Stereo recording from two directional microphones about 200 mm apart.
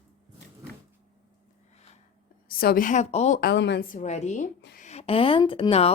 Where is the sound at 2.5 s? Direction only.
45° left (ahead or behind).